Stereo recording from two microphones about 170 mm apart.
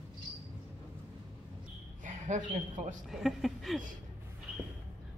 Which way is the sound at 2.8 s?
40° right (ahead or behind).